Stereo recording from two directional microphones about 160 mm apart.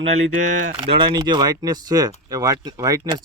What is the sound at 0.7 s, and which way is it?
Speech, 35° right (ahead or behind).